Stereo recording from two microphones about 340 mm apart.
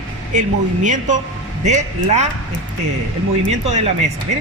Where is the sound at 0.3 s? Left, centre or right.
Right.